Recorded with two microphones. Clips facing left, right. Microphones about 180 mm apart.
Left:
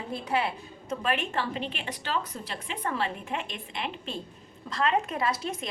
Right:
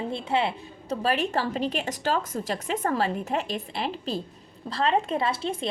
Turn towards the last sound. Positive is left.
turn(degrees=-30)  # may be behind; listen again after turning